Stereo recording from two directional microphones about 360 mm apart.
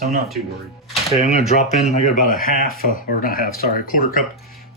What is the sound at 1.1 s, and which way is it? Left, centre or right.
Speech, centre.